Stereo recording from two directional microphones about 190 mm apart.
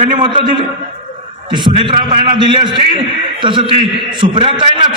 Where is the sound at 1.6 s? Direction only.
25° right (ahead or behind).